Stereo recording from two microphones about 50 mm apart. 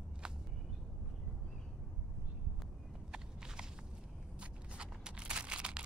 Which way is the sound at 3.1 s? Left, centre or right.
Centre.